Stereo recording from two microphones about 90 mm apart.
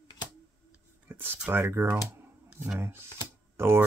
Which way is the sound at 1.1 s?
25° right (ahead or behind).